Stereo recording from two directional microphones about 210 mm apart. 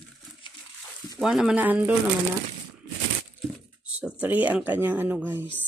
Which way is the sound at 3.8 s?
5° right (ahead or behind).